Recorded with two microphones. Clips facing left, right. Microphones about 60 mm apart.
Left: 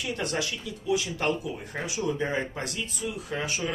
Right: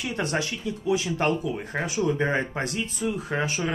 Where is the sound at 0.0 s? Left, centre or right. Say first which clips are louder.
Right 3 dB; right.